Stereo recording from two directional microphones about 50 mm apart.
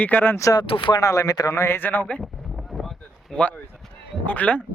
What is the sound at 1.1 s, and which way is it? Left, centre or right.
Speech, left.